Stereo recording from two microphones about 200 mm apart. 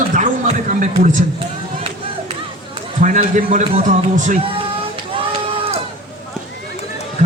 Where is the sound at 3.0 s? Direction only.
40° right (ahead or behind).